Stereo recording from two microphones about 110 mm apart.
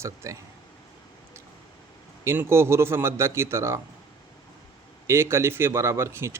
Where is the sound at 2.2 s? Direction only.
25° right (ahead or behind).